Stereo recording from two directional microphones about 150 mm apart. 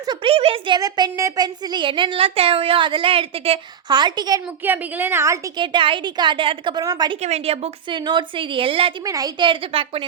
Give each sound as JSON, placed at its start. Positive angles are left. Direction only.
{"t": 0.0, "sound": "speech", "side_deg": -30}
{"t": 0.8, "sound": "speech", "side_deg": -25}
{"t": 3.8, "sound": "speech", "side_deg": -30}
{"t": 4.6, "sound": "a woman's voice", "side_deg": -15}
{"t": 5.5, "sound": "speech", "side_deg": -35}
{"t": 7.2, "sound": "speech", "side_deg": -45}
{"t": 9.0, "sound": "speech", "side_deg": -25}